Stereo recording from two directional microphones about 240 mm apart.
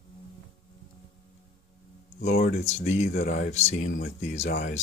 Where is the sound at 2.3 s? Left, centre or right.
Left.